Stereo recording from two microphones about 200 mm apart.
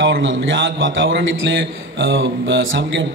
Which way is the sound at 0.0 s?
65° right (ahead or behind).